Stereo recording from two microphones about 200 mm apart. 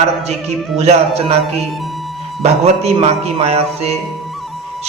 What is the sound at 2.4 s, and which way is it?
A man's voice, 30° right (ahead or behind).